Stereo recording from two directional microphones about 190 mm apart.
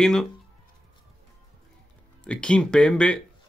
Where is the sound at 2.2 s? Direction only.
5° left (ahead or behind).